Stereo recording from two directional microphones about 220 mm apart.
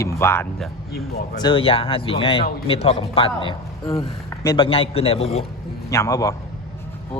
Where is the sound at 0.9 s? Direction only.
45° left (ahead or behind).